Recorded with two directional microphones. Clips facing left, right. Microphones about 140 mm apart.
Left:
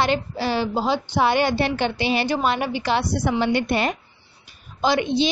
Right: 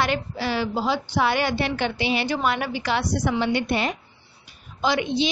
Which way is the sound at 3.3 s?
45° left (ahead or behind).